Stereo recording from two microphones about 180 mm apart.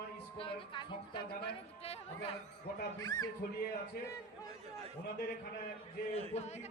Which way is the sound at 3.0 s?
20° left (ahead or behind).